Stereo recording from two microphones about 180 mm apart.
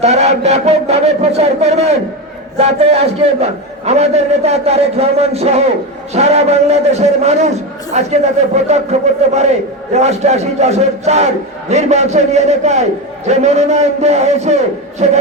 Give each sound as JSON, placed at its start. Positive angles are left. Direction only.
{"t": 0.0, "sound": "a man's voice", "side_deg": -40}